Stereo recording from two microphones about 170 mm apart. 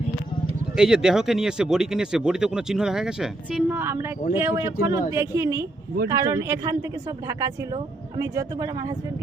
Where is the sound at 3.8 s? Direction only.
15° right (ahead or behind).